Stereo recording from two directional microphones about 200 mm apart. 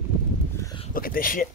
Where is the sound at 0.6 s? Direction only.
20° left (ahead or behind).